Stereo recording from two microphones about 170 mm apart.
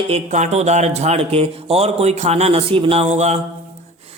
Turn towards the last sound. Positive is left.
turn(degrees=-40)  # may be behind; listen again after turning